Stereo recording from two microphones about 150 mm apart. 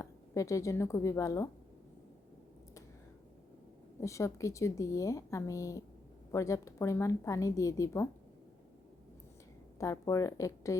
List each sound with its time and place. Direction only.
0.0 s speech: 20° left (ahead or behind)
4.0 s speech: 20° left (ahead or behind)
9.7 s speech: 20° left (ahead or behind)